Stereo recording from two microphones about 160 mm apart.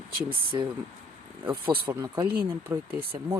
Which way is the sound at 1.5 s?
30° right (ahead or behind).